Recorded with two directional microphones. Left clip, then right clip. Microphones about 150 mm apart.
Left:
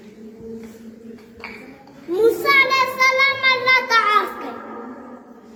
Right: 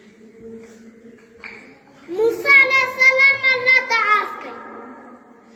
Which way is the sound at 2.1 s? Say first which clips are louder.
Right 2 dB; 30° left (ahead or behind).